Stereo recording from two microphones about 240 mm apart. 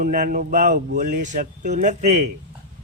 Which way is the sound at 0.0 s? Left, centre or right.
Right.